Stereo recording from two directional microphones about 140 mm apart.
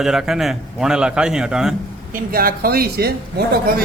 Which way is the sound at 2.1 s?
90° right.